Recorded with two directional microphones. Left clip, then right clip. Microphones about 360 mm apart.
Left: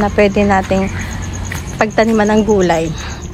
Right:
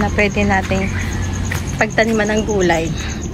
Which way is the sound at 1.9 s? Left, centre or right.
Centre.